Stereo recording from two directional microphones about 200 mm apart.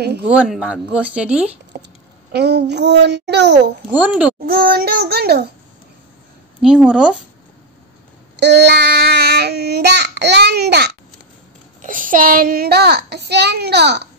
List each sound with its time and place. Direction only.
0.3 s speech: 5° right (ahead or behind)
1.7 s a sound: 50° right (ahead or behind)
2.3 s child singing: 55° right (ahead or behind)
3.9 s speech: 5° right (ahead or behind)
4.5 s a child's voice: 50° right (ahead or behind)
6.6 s speech: 5° right (ahead or behind)
8.4 s child singing: 55° right (ahead or behind)
11.8 s a child's voice: 40° right (ahead or behind); by 14.0 s 55° right (ahead or behind)